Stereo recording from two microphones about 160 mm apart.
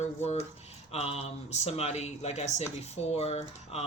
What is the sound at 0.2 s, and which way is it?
Speech, 45° left (ahead or behind).